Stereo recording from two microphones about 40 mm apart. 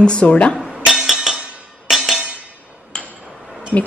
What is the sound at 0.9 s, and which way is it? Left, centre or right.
Music, centre.